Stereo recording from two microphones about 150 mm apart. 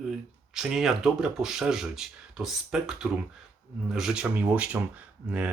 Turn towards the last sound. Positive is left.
turn(degrees=-5)  # may be behind; listen again after turning